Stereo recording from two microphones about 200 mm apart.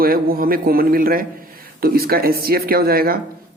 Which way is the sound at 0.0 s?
45° right (ahead or behind).